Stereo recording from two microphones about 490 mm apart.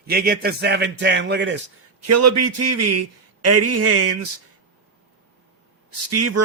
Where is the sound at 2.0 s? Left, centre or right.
Right.